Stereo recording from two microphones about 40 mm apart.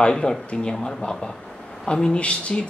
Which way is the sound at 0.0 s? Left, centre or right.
Left.